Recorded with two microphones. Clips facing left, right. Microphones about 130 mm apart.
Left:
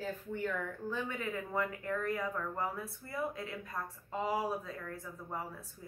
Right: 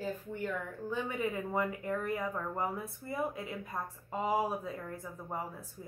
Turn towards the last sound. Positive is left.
turn(degrees=-25)  # may be behind; listen again after turning